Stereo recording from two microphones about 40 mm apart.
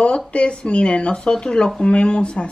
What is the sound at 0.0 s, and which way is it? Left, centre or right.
Speech, left.